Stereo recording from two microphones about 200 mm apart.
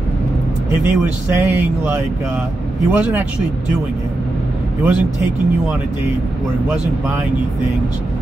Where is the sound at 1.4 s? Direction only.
10° right (ahead or behind).